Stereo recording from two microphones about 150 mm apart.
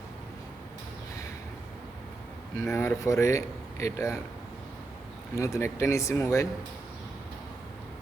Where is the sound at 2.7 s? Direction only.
20° left (ahead or behind).